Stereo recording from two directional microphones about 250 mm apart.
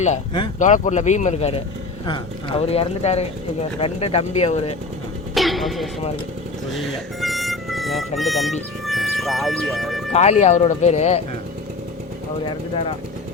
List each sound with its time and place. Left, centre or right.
0.0 s speech: left
5.3 s music: centre
6.7 s speech: centre
10.1 s speech: left